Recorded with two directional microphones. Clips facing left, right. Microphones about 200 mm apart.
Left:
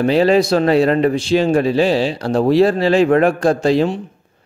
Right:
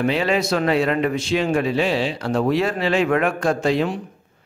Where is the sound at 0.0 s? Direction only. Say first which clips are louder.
Left 7 dB; 35° left (ahead or behind).